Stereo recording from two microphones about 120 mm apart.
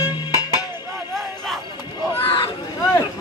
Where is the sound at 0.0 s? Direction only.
30° left (ahead or behind).